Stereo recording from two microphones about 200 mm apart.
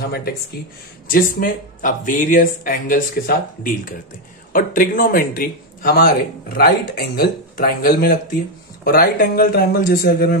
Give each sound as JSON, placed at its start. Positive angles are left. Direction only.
{"t": 0.0, "sound": "speech", "side_deg": 50}